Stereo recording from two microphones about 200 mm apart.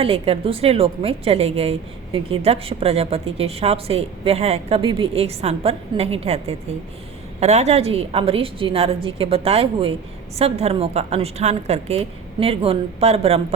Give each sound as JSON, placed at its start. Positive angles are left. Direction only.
{"t": 0.0, "sound": "a woman's voice", "side_deg": -30}